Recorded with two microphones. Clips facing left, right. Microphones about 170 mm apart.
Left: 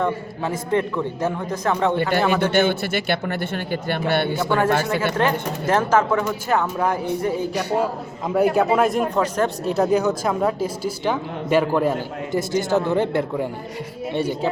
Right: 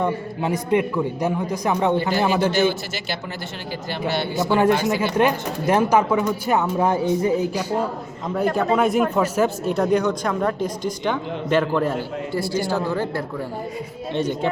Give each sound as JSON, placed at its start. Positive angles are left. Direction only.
{"t": 0.0, "sound": "a man's voice", "side_deg": -15}
{"t": 2.0, "sound": "a man's voice", "side_deg": 60}
{"t": 4.8, "sound": "a man's voice", "side_deg": -15}
{"t": 7.5, "sound": "a man's voice", "side_deg": 65}
{"t": 8.3, "sound": "speech", "side_deg": 5}
{"t": 9.7, "sound": "a man's voice", "side_deg": 5}
{"t": 14.1, "sound": "speech", "side_deg": 10}